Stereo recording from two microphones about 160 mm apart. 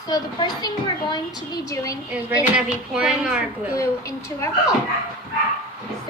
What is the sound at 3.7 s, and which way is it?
A woman's voice, 20° left (ahead or behind).